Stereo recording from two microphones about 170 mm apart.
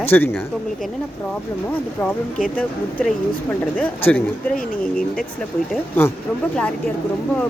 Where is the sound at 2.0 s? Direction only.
15° left (ahead or behind).